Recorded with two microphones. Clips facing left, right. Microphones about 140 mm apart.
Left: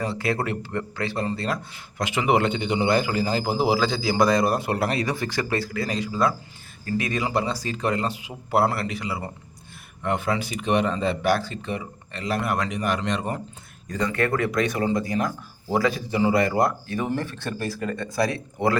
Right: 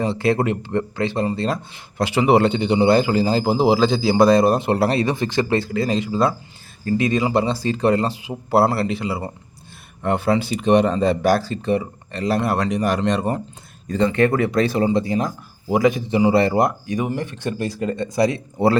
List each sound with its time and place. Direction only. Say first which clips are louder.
0.0 s speech: right 6 dB; 25° right (ahead or behind)